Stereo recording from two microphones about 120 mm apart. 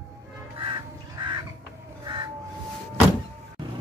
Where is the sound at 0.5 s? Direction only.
45° right (ahead or behind).